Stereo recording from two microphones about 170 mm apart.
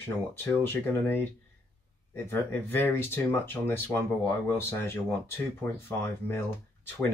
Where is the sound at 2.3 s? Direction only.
15° left (ahead or behind).